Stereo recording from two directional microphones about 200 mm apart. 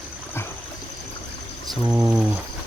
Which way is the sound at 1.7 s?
5° right (ahead or behind).